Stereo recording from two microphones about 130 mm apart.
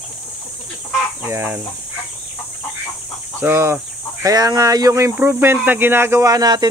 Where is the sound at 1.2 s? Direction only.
15° right (ahead or behind).